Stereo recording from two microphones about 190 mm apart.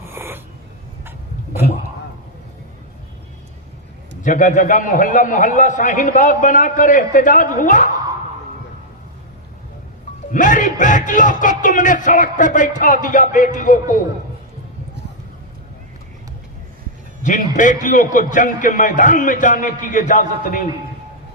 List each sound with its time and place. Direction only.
0.0 s a sound: 10° right (ahead or behind)
4.2 s a man's voice: 40° left (ahead or behind)
10.3 s a man's voice: 45° left (ahead or behind)
17.2 s a man's voice: 40° left (ahead or behind)